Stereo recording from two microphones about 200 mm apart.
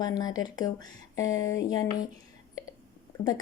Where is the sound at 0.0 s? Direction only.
20° left (ahead or behind).